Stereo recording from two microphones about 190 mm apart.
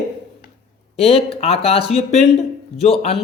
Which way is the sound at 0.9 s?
30° left (ahead or behind).